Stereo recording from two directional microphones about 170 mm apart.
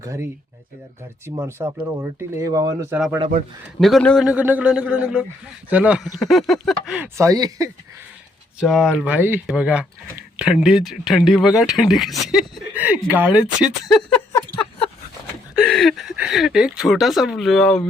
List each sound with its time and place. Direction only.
0.0 s speech: 20° right (ahead or behind)
1.4 s speech: 15° right (ahead or behind)
2.9 s speech: 10° right (ahead or behind)
3.8 s speech: centre (ahead or behind); by 7.7 s 20° right (ahead or behind)
8.6 s speech: centre (ahead or behind)
15.6 s speech: centre (ahead or behind)